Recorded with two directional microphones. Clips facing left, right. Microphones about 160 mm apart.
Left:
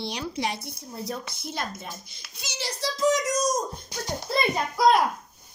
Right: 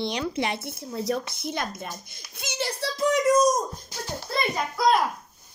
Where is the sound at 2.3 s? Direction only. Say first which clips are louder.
Right 5 dB; 55° right (ahead or behind).